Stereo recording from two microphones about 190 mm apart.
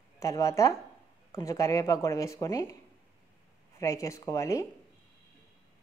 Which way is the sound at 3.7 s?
15° left (ahead or behind).